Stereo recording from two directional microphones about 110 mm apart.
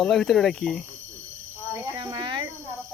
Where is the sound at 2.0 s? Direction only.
40° right (ahead or behind).